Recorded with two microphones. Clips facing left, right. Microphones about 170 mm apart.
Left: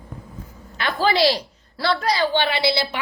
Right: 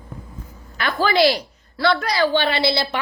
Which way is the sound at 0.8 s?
30° left (ahead or behind).